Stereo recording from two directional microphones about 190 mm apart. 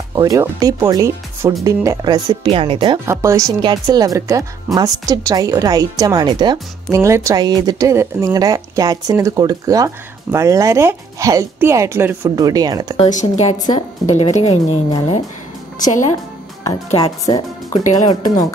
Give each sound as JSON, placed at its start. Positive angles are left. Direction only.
{"t": 0.1, "sound": "speech", "side_deg": -20}
{"t": 3.1, "sound": "a woman's voice", "side_deg": -15}
{"t": 13.0, "sound": "speech", "side_deg": 40}
{"t": 15.8, "sound": "a woman's voice", "side_deg": 40}
{"t": 16.6, "sound": "a woman's voice", "side_deg": 20}